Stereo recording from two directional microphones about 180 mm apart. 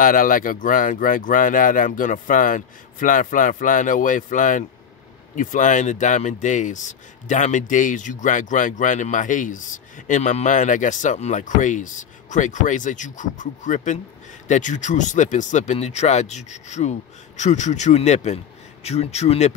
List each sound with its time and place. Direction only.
0.0 s speech: 50° left (ahead or behind)